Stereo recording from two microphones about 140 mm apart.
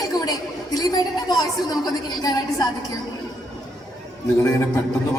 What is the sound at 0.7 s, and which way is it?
A woman's voice, 30° left (ahead or behind).